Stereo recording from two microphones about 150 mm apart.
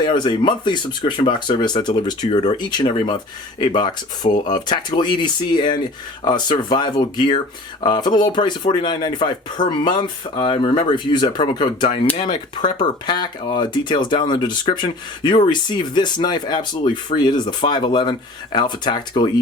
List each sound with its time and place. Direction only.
0.0 s speech: 30° left (ahead or behind)